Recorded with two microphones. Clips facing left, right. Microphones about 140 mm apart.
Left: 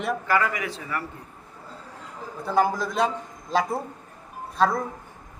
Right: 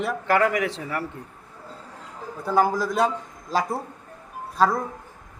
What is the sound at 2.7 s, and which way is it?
Speech, 10° right (ahead or behind).